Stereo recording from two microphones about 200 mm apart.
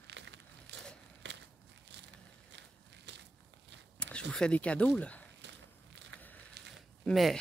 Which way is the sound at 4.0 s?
5° left (ahead or behind).